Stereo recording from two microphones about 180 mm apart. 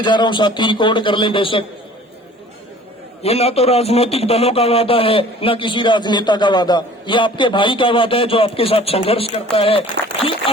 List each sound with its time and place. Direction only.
0.0 s a man's voice: 25° left (ahead or behind)
3.2 s speech: 35° left (ahead or behind)